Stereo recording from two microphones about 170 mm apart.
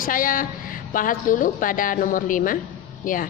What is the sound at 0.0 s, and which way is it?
A woman's voice, 55° left (ahead or behind).